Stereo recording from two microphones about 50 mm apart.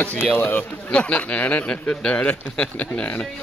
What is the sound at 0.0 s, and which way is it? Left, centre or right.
Speech, left.